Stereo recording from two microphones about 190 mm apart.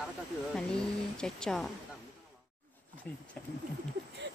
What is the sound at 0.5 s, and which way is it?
Speech, 5° left (ahead or behind).